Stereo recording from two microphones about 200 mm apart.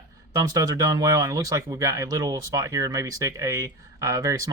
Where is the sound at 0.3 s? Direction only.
20° right (ahead or behind).